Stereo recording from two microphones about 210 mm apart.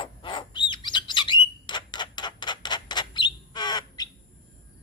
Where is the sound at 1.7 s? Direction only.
20° left (ahead or behind).